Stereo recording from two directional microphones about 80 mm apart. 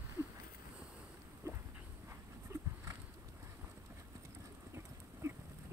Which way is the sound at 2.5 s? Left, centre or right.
Right.